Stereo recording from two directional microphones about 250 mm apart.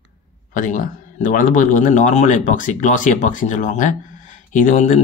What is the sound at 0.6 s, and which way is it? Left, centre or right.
Speech, left.